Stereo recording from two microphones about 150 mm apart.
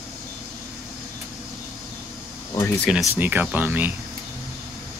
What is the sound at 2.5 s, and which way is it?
Speech, 20° left (ahead or behind).